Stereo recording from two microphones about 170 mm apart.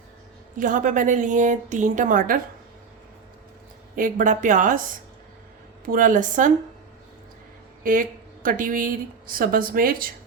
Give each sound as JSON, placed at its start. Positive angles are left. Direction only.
{"t": 0.5, "sound": "a woman's voice", "side_deg": -50}
{"t": 3.9, "sound": "a woman's voice", "side_deg": -50}
{"t": 5.8, "sound": "a woman's voice", "side_deg": -55}
{"t": 8.4, "sound": "speech", "side_deg": -55}